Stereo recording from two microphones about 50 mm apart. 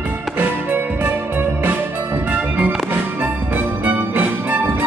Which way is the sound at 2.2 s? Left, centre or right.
Right.